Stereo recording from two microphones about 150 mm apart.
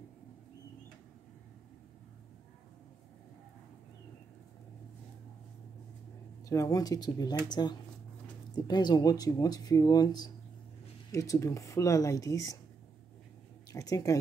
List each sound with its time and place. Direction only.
6.5 s speech: 20° left (ahead or behind)
13.7 s speech: 25° left (ahead or behind)